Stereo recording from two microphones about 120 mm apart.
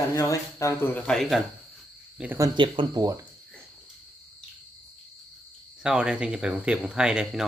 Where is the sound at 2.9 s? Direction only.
30° right (ahead or behind).